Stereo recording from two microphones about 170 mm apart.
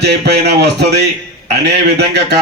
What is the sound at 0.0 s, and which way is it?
A man's voice, 75° right (ahead or behind).